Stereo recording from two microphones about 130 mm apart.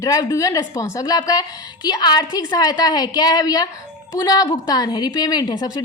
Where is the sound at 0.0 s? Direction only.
25° left (ahead or behind).